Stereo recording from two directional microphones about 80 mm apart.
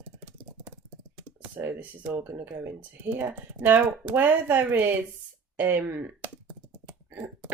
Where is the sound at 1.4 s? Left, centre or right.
Right.